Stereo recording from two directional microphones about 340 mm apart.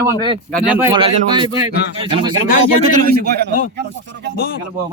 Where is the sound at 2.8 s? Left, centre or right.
Right.